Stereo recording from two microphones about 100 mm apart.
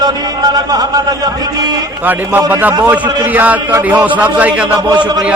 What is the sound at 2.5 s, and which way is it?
A man's voice, 20° right (ahead or behind).